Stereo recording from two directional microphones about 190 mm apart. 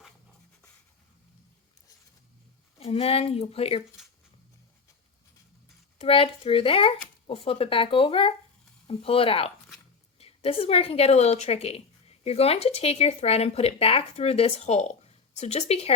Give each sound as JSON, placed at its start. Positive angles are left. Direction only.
{"t": 2.7, "sound": "a woman's voice", "side_deg": 30}
{"t": 6.0, "sound": "a woman's voice", "side_deg": 30}